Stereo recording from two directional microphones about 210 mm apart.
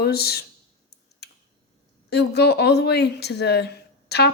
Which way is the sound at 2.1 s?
50° left (ahead or behind).